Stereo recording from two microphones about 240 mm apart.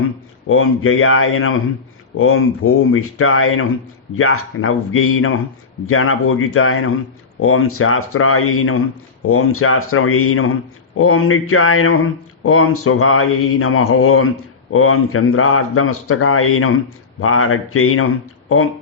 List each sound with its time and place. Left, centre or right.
0.4 s a man's voice: left